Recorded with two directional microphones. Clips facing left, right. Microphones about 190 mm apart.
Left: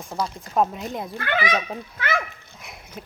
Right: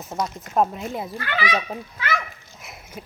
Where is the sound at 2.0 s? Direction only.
50° left (ahead or behind).